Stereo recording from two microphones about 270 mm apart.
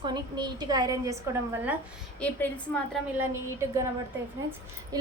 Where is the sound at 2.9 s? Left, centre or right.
Centre.